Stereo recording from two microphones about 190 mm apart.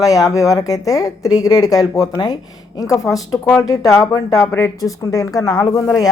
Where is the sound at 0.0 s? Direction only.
20° left (ahead or behind).